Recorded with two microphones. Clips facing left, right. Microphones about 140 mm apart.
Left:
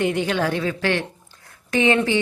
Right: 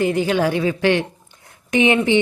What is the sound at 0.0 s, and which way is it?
A woman's voice, centre (ahead or behind).